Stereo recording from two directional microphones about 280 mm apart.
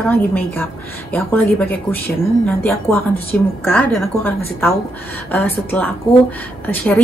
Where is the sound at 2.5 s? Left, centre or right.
Centre.